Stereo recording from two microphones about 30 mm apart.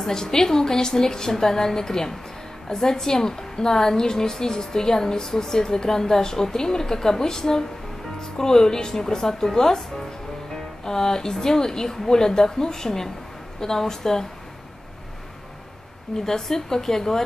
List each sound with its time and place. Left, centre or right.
0.0 s a woman's voice: centre
16.3 s a woman's voice: centre